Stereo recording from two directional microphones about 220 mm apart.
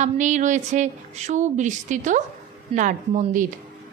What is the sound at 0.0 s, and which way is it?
A woman's voice, 35° right (ahead or behind).